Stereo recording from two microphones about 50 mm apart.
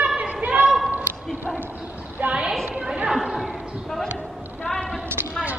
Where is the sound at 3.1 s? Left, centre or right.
Centre.